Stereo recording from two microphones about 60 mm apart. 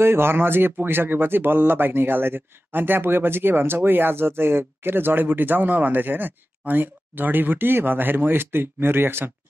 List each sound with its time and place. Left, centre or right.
0.0 s speech: right